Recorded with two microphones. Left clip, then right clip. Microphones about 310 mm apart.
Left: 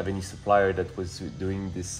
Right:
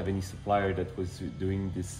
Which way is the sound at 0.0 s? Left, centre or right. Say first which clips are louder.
Left 4 dB; left.